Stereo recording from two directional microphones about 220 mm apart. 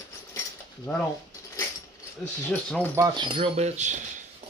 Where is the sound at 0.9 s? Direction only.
10° left (ahead or behind).